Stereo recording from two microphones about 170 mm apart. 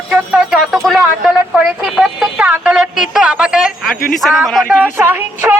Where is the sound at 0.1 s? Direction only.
Centre (ahead or behind).